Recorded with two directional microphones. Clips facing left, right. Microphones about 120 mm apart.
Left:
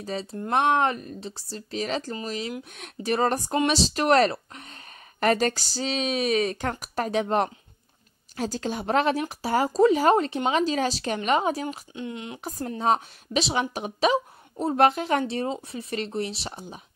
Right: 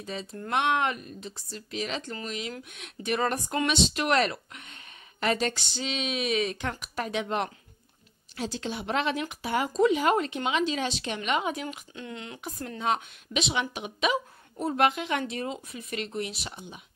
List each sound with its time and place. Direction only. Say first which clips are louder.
0.0 s a woman's voice: left 5 dB; 35° left (ahead or behind)
11.9 s speech: left 5 dB; 20° left (ahead or behind)
12.4 s a woman's voice: left 5 dB; 35° left (ahead or behind)